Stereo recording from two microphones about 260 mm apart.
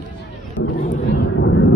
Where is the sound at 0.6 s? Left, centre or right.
Left.